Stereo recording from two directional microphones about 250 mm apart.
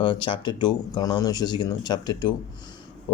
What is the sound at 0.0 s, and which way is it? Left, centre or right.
Speech, centre.